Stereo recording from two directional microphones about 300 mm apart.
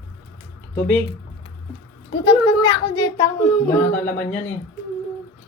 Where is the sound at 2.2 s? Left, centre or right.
Centre.